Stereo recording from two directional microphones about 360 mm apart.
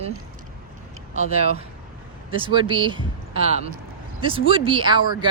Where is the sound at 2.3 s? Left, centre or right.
Centre.